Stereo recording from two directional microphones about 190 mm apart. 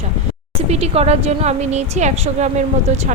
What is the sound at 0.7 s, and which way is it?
A woman's voice, 35° right (ahead or behind).